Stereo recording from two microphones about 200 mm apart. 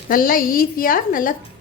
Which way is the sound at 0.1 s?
45° left (ahead or behind).